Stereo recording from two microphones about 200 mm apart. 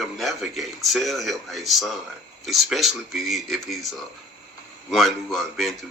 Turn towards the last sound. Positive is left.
turn(degrees=0)  # may be behind; listen again after turning